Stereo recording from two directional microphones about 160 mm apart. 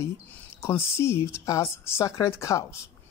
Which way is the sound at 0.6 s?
15° left (ahead or behind).